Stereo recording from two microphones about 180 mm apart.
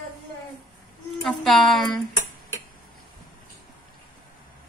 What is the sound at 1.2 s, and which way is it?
Speech, centre (ahead or behind).